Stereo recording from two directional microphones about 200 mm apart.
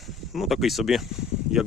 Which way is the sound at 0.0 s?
Centre (ahead or behind).